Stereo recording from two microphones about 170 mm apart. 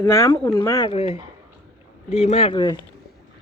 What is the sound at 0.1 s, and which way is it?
Speech, 15° left (ahead or behind).